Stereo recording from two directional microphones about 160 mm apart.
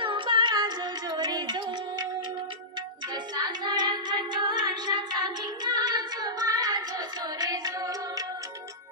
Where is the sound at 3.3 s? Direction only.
25° right (ahead or behind).